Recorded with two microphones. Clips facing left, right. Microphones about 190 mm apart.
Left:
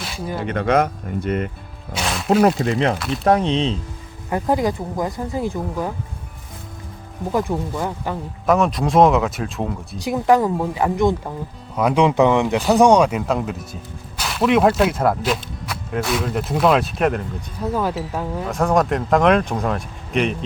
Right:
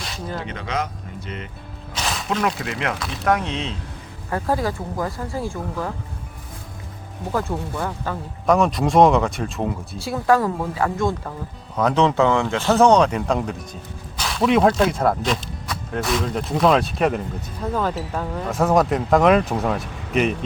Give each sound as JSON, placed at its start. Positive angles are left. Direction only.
{"t": 0.0, "sound": "music", "side_deg": 10}
{"t": 0.4, "sound": "speech", "side_deg": 55}
{"t": 2.6, "sound": "speech", "side_deg": 35}
{"t": 4.3, "sound": "speech", "side_deg": 15}
{"t": 7.8, "sound": "speech", "side_deg": 15}
{"t": 8.4, "sound": "speech", "side_deg": 0}
{"t": 10.0, "sound": "speech", "side_deg": 20}